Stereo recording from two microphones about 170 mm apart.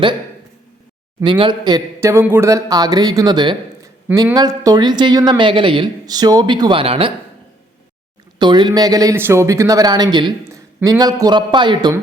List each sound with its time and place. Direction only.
1.2 s a man's voice: 25° right (ahead or behind)
8.4 s a man's voice: 25° right (ahead or behind)